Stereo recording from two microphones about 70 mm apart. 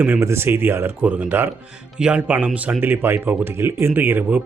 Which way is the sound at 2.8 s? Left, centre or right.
Right.